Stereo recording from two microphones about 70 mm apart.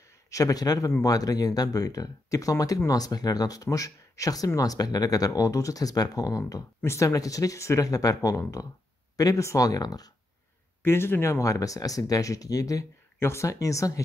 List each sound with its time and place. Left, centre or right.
0.3 s speech: left
6.8 s speech: left
10.8 s speech: left
11.4 s speech: left
13.2 s speech: left